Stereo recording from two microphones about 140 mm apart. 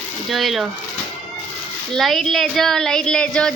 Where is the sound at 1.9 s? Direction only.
Centre (ahead or behind).